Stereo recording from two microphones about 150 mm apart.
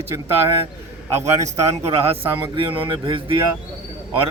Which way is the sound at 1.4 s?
45° right (ahead or behind).